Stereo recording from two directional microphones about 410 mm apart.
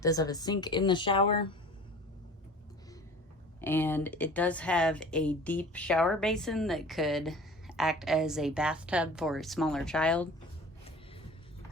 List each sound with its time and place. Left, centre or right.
0.0 s speech: centre
3.6 s speech: centre